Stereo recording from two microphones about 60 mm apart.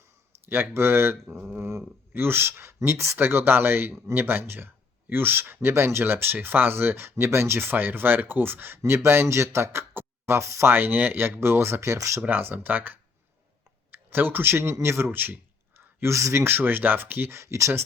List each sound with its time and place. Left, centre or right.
0.4 s speech: right
3.2 s speech: right
12.2 s speech: right
16.0 s speech: right